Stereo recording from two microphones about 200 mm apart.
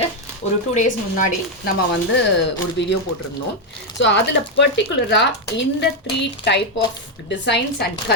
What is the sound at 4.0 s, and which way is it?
Speech, 60° left (ahead or behind).